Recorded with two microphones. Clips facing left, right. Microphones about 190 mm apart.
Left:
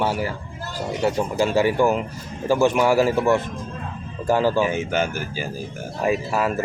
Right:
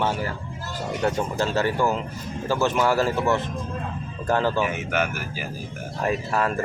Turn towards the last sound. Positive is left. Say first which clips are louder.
# left 2 dB
turn(degrees=5)  # may be behind; listen again after turning